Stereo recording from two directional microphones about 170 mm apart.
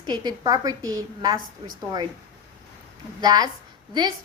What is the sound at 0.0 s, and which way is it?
A woman's voice, 25° right (ahead or behind).